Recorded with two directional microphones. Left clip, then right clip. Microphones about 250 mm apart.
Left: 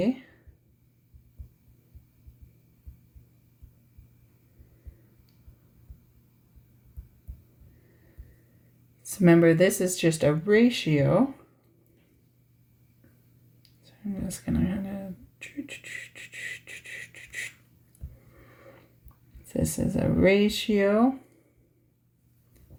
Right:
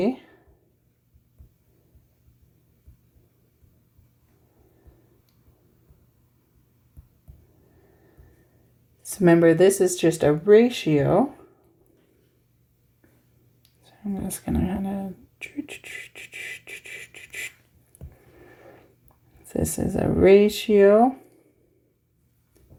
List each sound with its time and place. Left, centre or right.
9.2 s speech: right
14.1 s speech: right
15.6 s beatboxing: right
16.7 s a sound: right
19.5 s speech: right